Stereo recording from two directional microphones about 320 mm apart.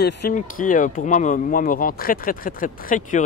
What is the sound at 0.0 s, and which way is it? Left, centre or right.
Speech, left.